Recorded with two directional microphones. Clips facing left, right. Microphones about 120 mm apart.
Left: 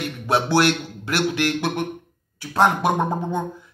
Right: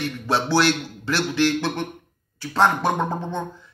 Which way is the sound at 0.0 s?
15° left (ahead or behind).